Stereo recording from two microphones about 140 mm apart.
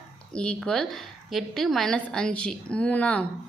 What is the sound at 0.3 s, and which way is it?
A woman's voice, 5° left (ahead or behind).